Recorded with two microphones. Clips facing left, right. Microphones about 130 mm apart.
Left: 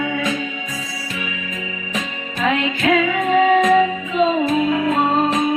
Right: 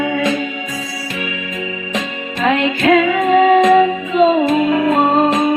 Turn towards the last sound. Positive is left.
turn(degrees=-65)  # may be behind; listen again after turning